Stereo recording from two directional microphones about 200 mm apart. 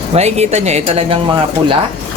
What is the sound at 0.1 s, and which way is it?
Speech, 35° right (ahead or behind).